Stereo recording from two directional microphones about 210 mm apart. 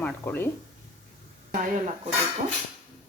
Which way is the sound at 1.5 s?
40° right (ahead or behind).